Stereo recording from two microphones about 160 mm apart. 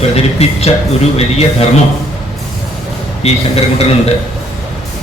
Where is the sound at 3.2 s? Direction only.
40° left (ahead or behind).